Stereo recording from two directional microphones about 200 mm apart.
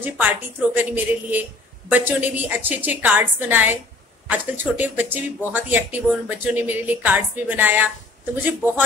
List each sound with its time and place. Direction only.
0.0 s speech: 10° right (ahead or behind)